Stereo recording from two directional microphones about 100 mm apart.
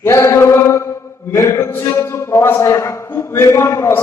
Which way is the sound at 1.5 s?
25° left (ahead or behind).